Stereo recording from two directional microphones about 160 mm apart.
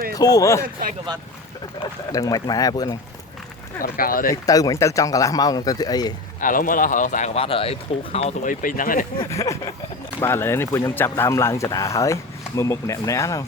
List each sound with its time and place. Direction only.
0.1 s speech: 25° left (ahead or behind)
2.1 s speech: 20° left (ahead or behind)
3.8 s speech: 60° left (ahead or behind)
4.4 s speech: 20° left (ahead or behind)
6.4 s speech: 60° left (ahead or behind)
7.3 s speech: 35° left (ahead or behind); by 9.0 s 60° left (ahead or behind)
9.3 s speech: 20° left (ahead or behind)